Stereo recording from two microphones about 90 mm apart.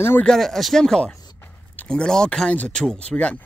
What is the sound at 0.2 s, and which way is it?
Speech, 5° left (ahead or behind).